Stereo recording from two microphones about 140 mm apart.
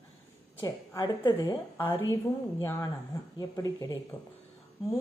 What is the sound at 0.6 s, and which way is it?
A woman's voice, 25° left (ahead or behind).